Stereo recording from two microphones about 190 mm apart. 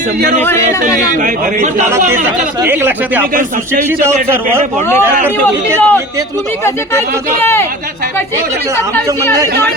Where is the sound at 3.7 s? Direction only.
10° right (ahead or behind).